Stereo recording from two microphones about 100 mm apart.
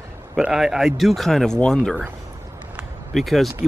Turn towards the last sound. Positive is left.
turn(degrees=0)  # may be behind; listen again after turning